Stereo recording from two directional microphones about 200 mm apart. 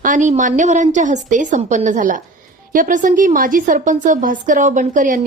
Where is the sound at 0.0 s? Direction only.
40° right (ahead or behind).